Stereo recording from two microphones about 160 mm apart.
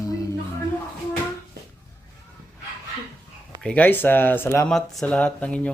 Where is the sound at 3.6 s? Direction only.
10° left (ahead or behind).